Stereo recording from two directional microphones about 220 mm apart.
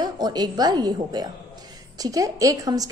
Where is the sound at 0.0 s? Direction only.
20° right (ahead or behind).